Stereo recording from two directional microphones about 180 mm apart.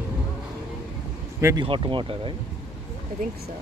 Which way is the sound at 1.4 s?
15° right (ahead or behind).